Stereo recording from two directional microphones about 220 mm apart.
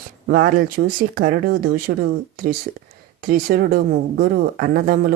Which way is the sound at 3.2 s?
40° right (ahead or behind).